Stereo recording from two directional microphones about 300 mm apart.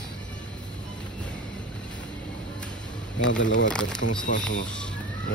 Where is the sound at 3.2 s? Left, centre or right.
Left.